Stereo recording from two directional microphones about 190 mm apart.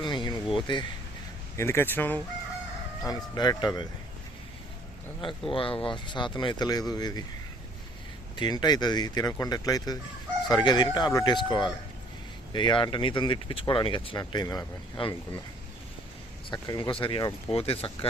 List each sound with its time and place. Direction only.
0.0 s a sound: 25° left (ahead or behind)
0.5 s speech: 25° left (ahead or behind)
1.5 s speech: 15° left (ahead or behind)
3.0 s speech: 20° left (ahead or behind)
5.5 s speech: 25° left (ahead or behind)
8.4 s speech: 20° left (ahead or behind)
16.5 s speech: 20° left (ahead or behind)